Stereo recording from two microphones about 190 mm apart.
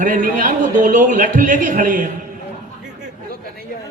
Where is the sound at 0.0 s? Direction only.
45° right (ahead or behind).